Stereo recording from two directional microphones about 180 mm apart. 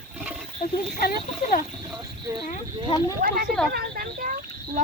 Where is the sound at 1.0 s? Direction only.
55° left (ahead or behind).